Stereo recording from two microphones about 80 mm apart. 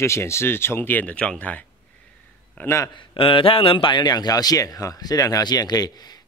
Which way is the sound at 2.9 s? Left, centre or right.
Left.